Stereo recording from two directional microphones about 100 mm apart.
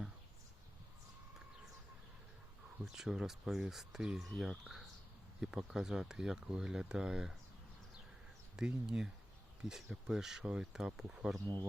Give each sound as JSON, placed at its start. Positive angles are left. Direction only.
{"t": 2.8, "sound": "speech", "side_deg": -5}
{"t": 5.4, "sound": "speech", "side_deg": -5}
{"t": 8.5, "sound": "speech", "side_deg": -5}
{"t": 11.4, "sound": "speech", "side_deg": -45}